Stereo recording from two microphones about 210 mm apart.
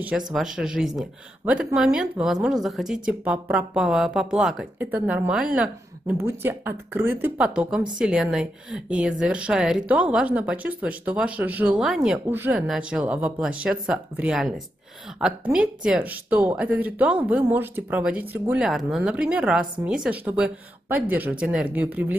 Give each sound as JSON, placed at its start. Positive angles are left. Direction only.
{"t": 0.3, "sound": "speech", "side_deg": 0}